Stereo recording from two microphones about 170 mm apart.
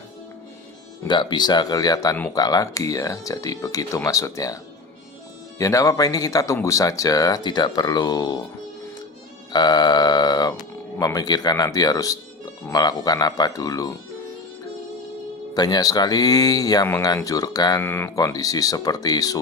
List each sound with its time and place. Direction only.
1.0 s speech: 25° left (ahead or behind)
9.5 s speech: 25° left (ahead or behind)
15.5 s speech: 20° left (ahead or behind)